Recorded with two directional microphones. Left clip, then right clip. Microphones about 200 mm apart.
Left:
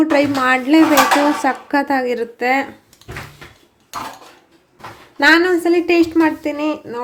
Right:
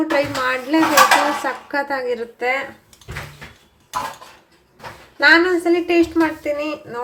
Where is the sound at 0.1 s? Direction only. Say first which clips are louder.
Left 4 dB; 40° left (ahead or behind).